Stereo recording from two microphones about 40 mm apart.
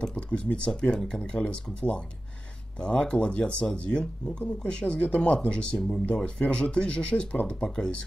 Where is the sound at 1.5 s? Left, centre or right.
Left.